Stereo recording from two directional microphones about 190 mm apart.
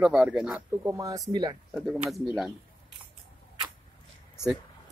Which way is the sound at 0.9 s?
20° right (ahead or behind).